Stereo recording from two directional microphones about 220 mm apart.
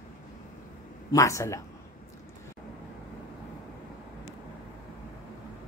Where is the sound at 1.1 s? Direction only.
15° left (ahead or behind).